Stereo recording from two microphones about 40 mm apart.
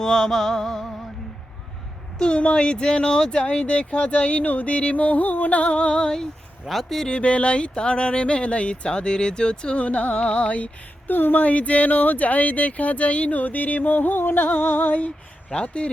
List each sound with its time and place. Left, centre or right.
0.0 s music: centre
2.1 s speech: left
6.7 s speech: centre
7.1 s speech: left
9.8 s speech: left
11.1 s speech: left
15.6 s speech: left